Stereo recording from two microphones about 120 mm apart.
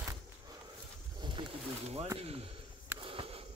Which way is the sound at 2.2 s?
55° right (ahead or behind).